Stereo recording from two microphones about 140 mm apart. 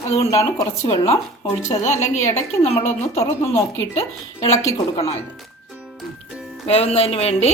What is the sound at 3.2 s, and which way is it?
Speech, 20° left (ahead or behind).